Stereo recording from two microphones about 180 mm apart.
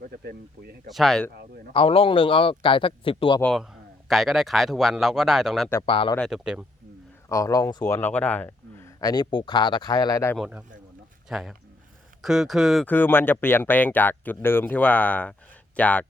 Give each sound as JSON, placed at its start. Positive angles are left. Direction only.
{"t": 0.1, "sound": "speech", "side_deg": -60}
{"t": 0.9, "sound": "speech", "side_deg": 0}
{"t": 1.7, "sound": "speech", "side_deg": 30}
{"t": 3.4, "sound": "speech", "side_deg": 0}
{"t": 5.8, "sound": "speech", "side_deg": 30}
{"t": 6.1, "sound": "speech", "side_deg": 0}
{"t": 7.3, "sound": "speech", "side_deg": 20}
{"t": 10.3, "sound": "speech", "side_deg": -5}